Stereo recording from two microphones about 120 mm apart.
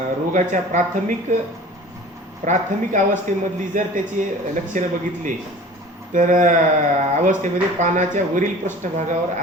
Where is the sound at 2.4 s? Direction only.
90° right.